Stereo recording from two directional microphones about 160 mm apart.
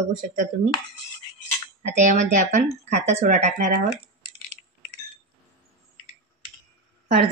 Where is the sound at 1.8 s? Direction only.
50° right (ahead or behind).